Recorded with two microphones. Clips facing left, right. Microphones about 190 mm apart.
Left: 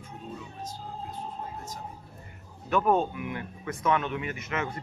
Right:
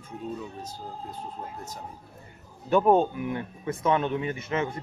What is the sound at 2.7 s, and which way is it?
Speech, 30° right (ahead or behind).